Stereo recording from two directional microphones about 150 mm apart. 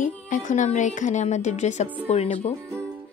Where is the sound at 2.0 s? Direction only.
45° left (ahead or behind).